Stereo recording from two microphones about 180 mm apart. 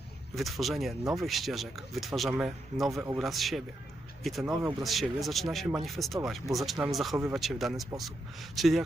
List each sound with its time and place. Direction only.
0.3 s speech: centre (ahead or behind)
2.9 s speech: 15° right (ahead or behind)
3.2 s speech: centre (ahead or behind)